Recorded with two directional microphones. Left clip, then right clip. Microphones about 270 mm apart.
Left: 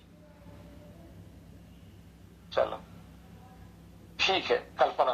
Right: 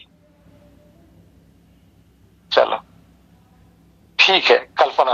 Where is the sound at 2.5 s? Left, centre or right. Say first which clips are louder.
Right 13 dB; right.